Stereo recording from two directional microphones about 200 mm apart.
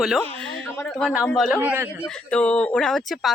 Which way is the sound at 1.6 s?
10° right (ahead or behind).